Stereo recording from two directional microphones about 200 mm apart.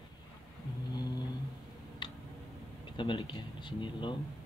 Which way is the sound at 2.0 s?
25° left (ahead or behind).